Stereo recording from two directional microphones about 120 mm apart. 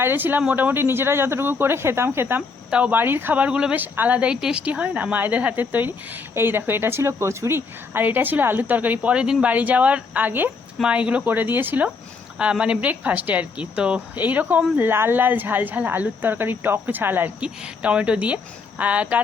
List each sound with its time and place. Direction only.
0.0 s speech: 15° right (ahead or behind)